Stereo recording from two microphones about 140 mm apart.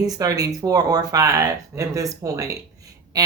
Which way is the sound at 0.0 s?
25° right (ahead or behind).